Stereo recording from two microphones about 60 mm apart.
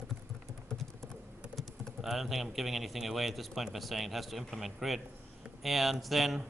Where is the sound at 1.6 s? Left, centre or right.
Centre.